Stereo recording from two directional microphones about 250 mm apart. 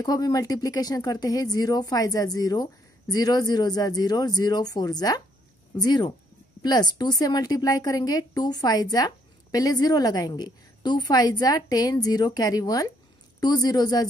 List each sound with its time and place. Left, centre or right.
0.0 s a woman's voice: centre